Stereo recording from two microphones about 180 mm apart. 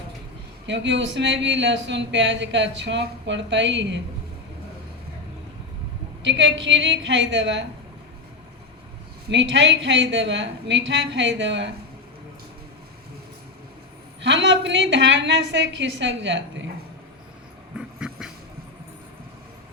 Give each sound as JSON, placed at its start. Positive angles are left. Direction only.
{"t": 0.7, "sound": "speech", "side_deg": -85}
{"t": 6.2, "sound": "speech", "side_deg": -90}
{"t": 9.3, "sound": "speech", "side_deg": -85}
{"t": 14.2, "sound": "speech", "side_deg": -80}
{"t": 17.7, "sound": "dog", "side_deg": -5}